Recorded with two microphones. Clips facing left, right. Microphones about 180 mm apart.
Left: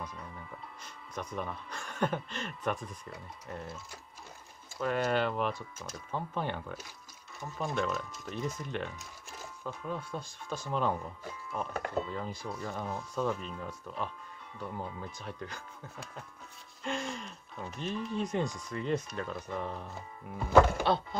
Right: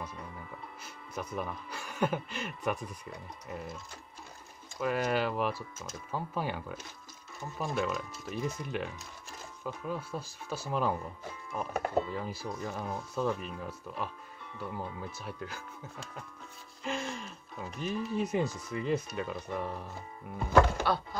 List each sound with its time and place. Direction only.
1.1 s speech: 5° right (ahead or behind)
4.7 s speech: 5° right (ahead or behind)
20.8 s speech: 25° left (ahead or behind)